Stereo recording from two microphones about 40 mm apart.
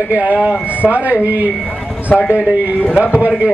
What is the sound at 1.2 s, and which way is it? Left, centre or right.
Speech, right.